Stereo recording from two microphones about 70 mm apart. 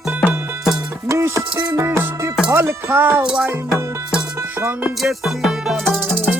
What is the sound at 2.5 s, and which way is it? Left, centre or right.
Speech, right.